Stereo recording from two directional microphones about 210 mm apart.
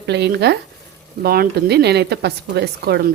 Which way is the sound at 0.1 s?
55° right (ahead or behind).